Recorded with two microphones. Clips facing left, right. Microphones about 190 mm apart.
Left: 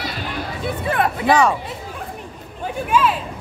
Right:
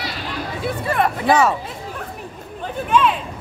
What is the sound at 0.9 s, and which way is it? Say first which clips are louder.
Speech: even; centre (ahead or behind).